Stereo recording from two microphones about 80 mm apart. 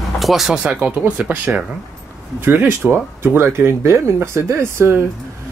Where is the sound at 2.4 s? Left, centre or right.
Right.